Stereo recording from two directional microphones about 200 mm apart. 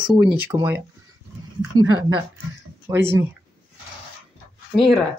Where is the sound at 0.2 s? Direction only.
5° right (ahead or behind).